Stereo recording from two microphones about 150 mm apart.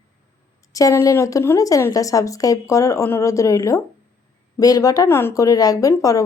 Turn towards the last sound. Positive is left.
turn(degrees=25)  # may be behind; listen again after turning